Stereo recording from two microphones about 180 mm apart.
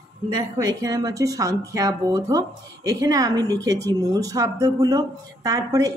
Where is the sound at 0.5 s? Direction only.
20° right (ahead or behind).